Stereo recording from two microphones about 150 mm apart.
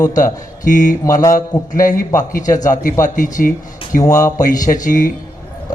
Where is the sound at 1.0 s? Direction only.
20° left (ahead or behind).